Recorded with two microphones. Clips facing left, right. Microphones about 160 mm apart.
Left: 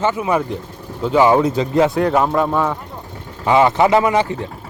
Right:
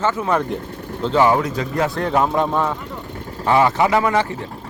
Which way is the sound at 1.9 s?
5° left (ahead or behind).